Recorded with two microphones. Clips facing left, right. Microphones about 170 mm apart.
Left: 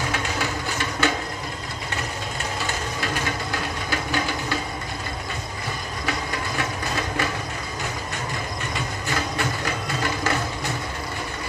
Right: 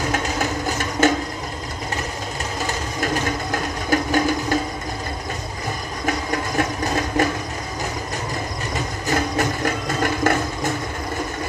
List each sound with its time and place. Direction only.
0.1 s music: 45° right (ahead or behind)
3.5 s a sound: 45° right (ahead or behind)
6.0 s music: 45° right (ahead or behind)
9.0 s music: 45° right (ahead or behind)